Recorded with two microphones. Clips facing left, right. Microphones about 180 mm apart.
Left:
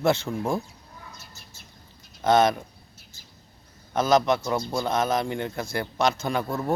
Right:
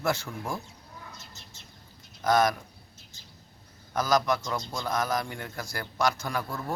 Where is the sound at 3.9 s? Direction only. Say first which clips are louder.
Left 5 dB; 25° left (ahead or behind).